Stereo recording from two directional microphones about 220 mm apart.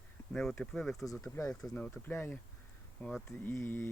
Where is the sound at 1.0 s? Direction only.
15° left (ahead or behind).